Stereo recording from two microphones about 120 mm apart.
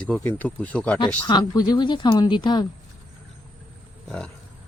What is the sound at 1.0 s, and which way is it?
Speech, 35° left (ahead or behind).